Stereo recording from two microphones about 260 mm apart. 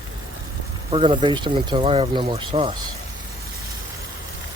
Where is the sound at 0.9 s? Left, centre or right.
Centre.